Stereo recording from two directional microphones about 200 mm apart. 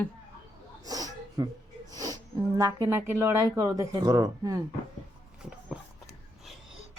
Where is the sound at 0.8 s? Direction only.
20° right (ahead or behind).